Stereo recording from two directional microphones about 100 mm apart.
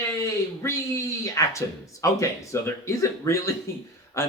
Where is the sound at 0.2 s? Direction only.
30° left (ahead or behind).